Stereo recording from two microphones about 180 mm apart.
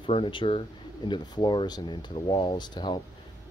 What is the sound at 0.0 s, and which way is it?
Speech, 30° left (ahead or behind).